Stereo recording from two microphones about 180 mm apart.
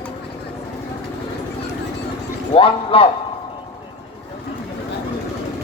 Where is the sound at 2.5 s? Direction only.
30° left (ahead or behind).